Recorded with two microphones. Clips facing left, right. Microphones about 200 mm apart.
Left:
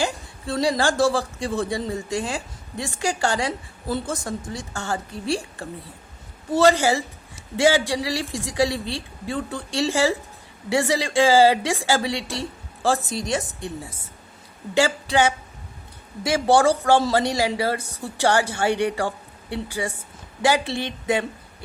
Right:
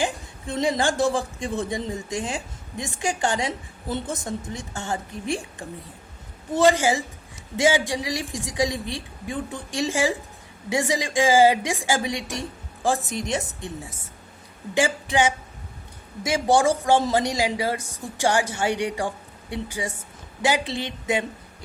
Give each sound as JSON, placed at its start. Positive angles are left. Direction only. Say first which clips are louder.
{"t": 0.0, "sound": "a woman's voice", "louder": "left 1 dB", "side_deg": -20}
{"t": 14.8, "sound": "a woman's voice", "louder": "left 2 dB", "side_deg": -20}
{"t": 16.6, "sound": "a woman's voice", "louder": "left 2 dB", "side_deg": -15}